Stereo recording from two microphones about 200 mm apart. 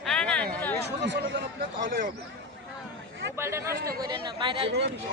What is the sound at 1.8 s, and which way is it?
Speech, 45° right (ahead or behind).